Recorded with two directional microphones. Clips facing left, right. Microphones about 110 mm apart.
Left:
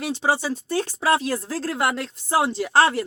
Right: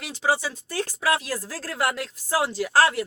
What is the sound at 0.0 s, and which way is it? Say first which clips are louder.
Speech: left 2 dB; 30° left (ahead or behind).